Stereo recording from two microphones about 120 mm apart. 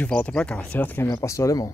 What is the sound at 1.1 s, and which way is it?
Speech, 25° left (ahead or behind).